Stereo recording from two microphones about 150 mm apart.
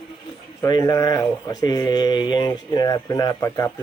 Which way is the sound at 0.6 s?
25° left (ahead or behind).